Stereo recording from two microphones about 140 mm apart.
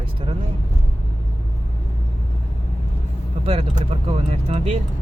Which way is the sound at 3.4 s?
40° right (ahead or behind).